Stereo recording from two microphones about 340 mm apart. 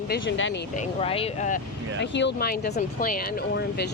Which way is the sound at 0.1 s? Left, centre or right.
Left.